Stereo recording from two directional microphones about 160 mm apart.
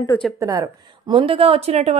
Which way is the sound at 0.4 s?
20° right (ahead or behind).